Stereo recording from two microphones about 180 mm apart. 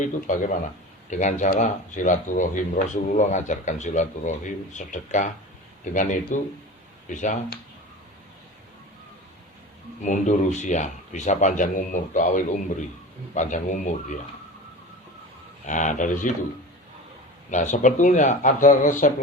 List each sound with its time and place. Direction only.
0.0 s speech: 45° left (ahead or behind)
10.0 s speech: 45° left (ahead or behind)
15.6 s speech: 45° left (ahead or behind)
17.5 s speech: 40° left (ahead or behind)